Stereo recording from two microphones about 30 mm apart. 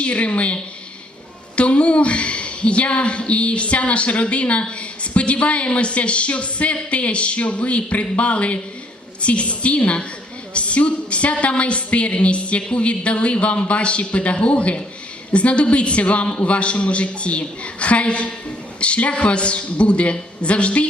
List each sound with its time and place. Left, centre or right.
0.0 s a woman's voice: left